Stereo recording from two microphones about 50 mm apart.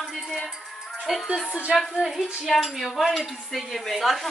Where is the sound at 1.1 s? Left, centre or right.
Centre.